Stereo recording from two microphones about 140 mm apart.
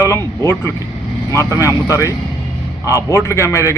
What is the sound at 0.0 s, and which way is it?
A man's voice, 15° left (ahead or behind).